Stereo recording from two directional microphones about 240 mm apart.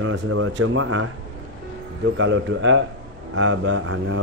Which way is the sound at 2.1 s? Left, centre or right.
Right.